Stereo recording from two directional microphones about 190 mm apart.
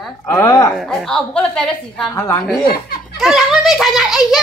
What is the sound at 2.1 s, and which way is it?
Speech, 15° left (ahead or behind).